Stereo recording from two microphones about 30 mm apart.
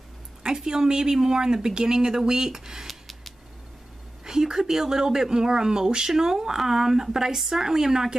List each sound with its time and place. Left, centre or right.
0.4 s a woman's voice: right
2.9 s scissors: centre
4.2 s speech: right
7.3 s speech: centre
7.6 s speech: centre